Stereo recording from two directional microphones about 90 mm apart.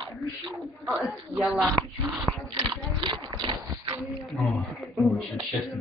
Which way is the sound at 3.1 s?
55° right (ahead or behind).